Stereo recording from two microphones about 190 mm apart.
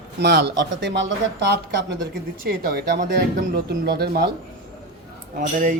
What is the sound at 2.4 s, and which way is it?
A man's voice, 50° right (ahead or behind).